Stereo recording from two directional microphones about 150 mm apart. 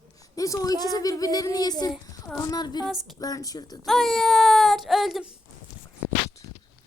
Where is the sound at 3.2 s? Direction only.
25° left (ahead or behind).